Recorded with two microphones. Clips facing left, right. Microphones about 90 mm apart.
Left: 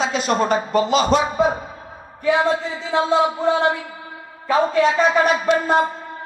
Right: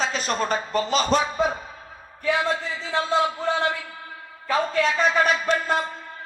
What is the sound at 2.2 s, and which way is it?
Speech, 35° left (ahead or behind).